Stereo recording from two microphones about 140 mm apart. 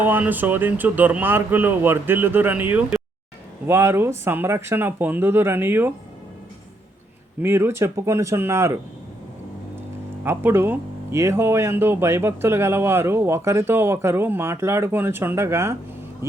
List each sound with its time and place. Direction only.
0.0 s speech: 15° right (ahead or behind)
7.4 s speech: 15° right (ahead or behind)
10.2 s speech: 15° right (ahead or behind)